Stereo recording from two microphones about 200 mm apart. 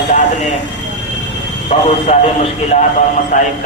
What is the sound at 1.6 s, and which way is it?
A man's voice, 35° left (ahead or behind).